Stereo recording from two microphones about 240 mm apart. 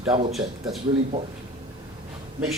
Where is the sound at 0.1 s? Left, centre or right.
Right.